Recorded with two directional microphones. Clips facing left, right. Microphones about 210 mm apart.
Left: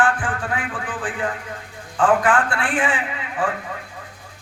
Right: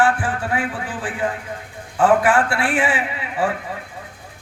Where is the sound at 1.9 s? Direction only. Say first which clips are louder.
Right 2 dB; 10° right (ahead or behind).